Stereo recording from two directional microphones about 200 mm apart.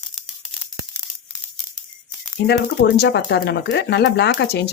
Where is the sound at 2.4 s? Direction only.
55° left (ahead or behind).